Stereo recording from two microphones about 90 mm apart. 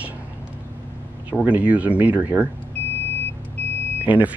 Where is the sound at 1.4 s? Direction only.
15° right (ahead or behind).